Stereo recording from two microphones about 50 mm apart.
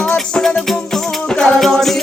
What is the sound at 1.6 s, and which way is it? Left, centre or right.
Music, centre.